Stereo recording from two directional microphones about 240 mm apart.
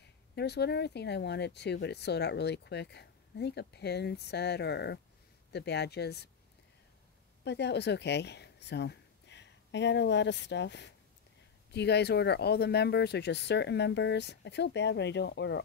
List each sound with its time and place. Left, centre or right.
0.0 s speech: left
7.4 s speech: left